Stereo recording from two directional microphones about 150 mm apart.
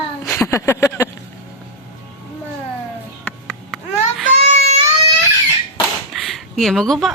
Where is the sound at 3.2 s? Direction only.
5° left (ahead or behind).